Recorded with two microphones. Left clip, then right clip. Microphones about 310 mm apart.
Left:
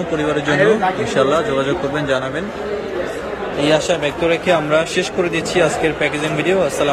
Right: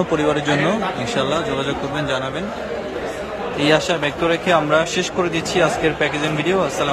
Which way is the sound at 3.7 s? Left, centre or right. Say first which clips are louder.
Left 1 dB; centre.